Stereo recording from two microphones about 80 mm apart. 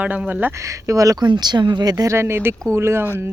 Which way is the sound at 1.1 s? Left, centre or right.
Right.